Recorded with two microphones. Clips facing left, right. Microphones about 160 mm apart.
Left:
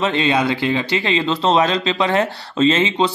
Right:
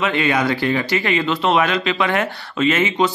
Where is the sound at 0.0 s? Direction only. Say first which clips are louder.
Left 1 dB; 25° left (ahead or behind).